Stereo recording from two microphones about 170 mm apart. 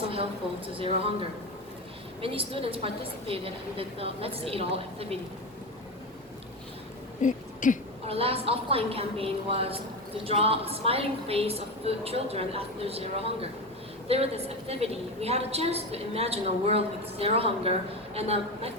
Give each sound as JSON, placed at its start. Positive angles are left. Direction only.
{"t": 0.8, "sound": "a woman's voice", "side_deg": -35}
{"t": 7.2, "sound": "a sound", "side_deg": 50}
{"t": 8.0, "sound": "a woman's voice", "side_deg": -35}